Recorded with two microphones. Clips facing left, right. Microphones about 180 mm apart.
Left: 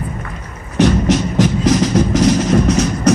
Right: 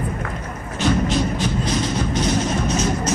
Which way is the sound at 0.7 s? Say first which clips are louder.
Left 6 dB; 80° left.